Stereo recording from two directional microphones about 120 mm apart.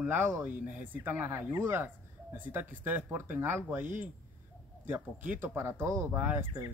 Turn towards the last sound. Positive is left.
turn(degrees=-15)  # may be behind; listen again after turning